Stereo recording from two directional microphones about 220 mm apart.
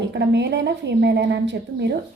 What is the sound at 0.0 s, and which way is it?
A woman's voice, 50° right (ahead or behind).